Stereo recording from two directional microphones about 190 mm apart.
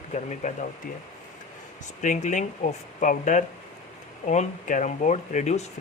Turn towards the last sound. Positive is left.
turn(degrees=40)  # may be behind; listen again after turning